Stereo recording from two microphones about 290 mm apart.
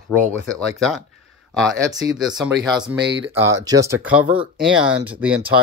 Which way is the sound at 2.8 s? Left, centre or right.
Centre.